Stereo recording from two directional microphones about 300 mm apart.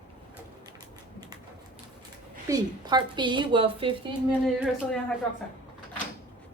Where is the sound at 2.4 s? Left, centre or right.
Centre.